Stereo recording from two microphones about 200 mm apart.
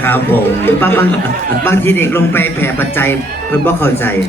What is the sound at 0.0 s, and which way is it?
A man's voice, 10° left (ahead or behind).